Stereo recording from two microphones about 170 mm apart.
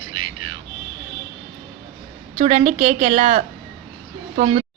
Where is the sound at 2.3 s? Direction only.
40° right (ahead or behind).